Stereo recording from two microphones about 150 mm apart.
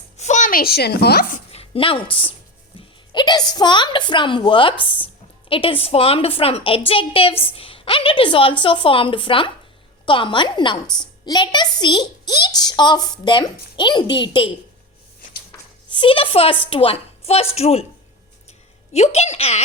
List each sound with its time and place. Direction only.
0.2 s a woman's voice: 55° left (ahead or behind); by 1.4 s 80° left
1.5 s a woman's voice: 35° left (ahead or behind)
15.9 s a woman's voice: 35° left (ahead or behind)
18.9 s a woman's voice: 45° left (ahead or behind)